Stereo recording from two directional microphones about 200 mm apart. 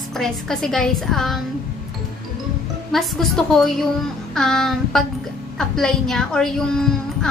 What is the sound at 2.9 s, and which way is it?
A woman's voice, centre (ahead or behind).